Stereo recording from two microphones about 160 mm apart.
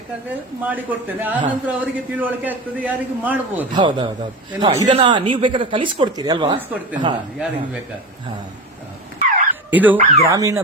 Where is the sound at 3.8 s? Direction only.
30° right (ahead or behind).